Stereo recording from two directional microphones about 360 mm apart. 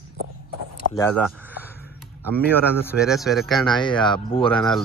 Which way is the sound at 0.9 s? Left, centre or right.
Centre.